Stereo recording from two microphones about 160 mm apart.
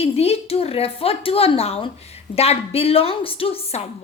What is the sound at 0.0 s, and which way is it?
A woman's voice, 40° left (ahead or behind).